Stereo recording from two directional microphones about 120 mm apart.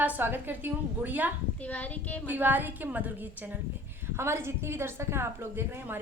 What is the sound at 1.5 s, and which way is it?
Speech, 15° left (ahead or behind).